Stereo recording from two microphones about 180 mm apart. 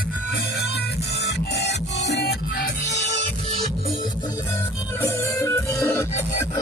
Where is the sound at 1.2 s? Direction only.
70° left (ahead or behind).